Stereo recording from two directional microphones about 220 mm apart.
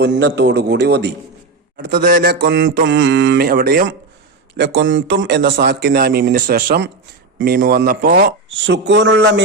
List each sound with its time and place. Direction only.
0.0 s a man's voice: 50° right (ahead or behind)